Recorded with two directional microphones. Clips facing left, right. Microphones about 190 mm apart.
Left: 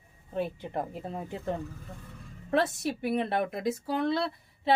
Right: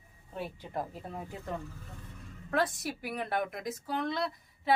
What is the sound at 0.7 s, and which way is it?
Speech, 20° left (ahead or behind).